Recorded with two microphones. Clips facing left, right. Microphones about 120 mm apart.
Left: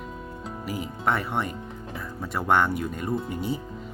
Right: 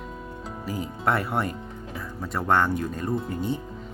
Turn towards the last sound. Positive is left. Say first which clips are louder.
# right 1 dB
turn(degrees=5)  # may be behind; listen again after turning